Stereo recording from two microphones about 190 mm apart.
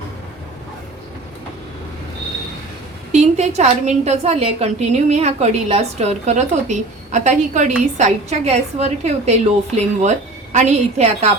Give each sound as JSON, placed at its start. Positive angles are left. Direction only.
{"t": 3.1, "sound": "a woman's voice", "side_deg": -35}